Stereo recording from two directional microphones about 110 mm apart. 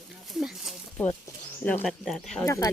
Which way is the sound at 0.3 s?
5° right (ahead or behind).